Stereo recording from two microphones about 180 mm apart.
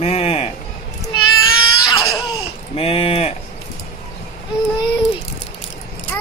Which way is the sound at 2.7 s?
35° left (ahead or behind).